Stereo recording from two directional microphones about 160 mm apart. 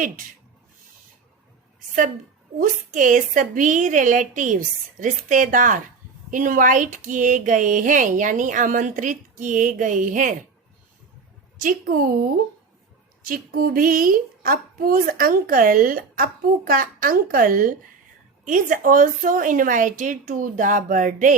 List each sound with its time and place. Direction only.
2.6 s a woman's voice: 55° right (ahead or behind)
11.6 s a woman's voice: 65° right (ahead or behind)
13.2 s a woman's voice: 60° right (ahead or behind)